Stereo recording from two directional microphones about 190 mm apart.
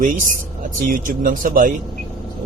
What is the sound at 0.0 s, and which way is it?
Speech, 45° right (ahead or behind).